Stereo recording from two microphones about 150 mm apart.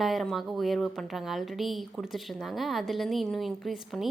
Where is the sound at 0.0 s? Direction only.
Centre (ahead or behind).